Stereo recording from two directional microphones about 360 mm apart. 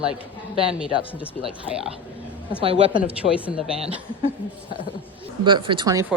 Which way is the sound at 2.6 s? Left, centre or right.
Centre.